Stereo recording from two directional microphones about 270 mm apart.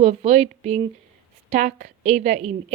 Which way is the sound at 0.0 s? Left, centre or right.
Right.